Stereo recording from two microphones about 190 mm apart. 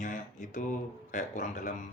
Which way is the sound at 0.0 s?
40° left (ahead or behind).